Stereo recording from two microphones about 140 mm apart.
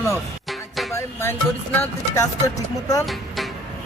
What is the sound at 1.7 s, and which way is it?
Speech, 20° left (ahead or behind).